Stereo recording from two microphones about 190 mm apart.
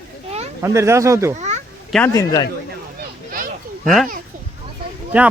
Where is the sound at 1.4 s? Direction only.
40° right (ahead or behind).